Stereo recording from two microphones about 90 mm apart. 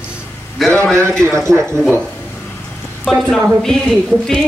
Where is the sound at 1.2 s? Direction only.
30° right (ahead or behind).